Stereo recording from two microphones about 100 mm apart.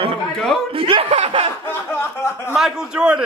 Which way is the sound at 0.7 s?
70° right (ahead or behind).